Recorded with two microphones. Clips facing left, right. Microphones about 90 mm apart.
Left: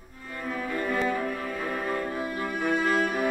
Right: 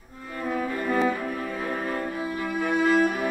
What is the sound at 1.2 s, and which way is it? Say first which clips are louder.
Music: right 1 dB; centre (ahead or behind).